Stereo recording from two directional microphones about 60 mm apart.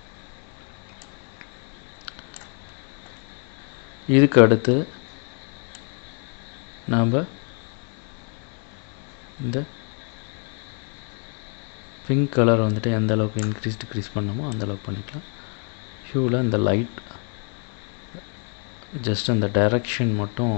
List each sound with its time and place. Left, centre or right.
4.1 s speech: right
6.9 s speech: right
12.1 s speech: right
19.0 s speech: right